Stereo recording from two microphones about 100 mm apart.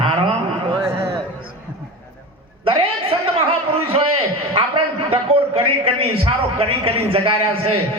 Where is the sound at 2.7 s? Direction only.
70° right (ahead or behind).